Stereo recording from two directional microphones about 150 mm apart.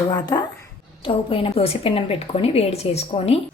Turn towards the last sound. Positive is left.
turn(degrees=40)  # may be behind; listen again after turning